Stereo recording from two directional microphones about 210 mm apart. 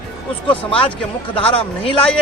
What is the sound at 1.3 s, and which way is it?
Speech, 25° left (ahead or behind).